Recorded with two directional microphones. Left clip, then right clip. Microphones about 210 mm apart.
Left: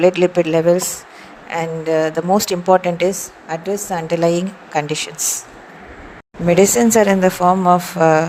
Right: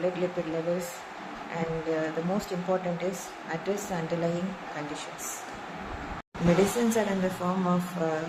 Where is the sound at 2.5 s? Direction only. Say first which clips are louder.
Left 14 dB; 50° left (ahead or behind).